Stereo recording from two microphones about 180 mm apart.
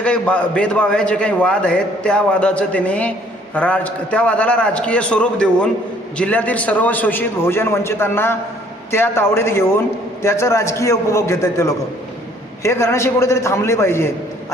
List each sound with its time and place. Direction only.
0.0 s a man's voice: 5° left (ahead or behind)